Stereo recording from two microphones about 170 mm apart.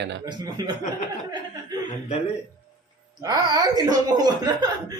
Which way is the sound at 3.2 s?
20° right (ahead or behind).